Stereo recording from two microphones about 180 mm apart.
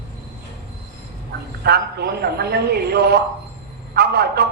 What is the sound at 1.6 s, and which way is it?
A man's voice, 65° right (ahead or behind).